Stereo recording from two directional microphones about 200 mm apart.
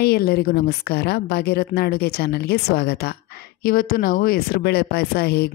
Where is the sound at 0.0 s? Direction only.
55° left (ahead or behind).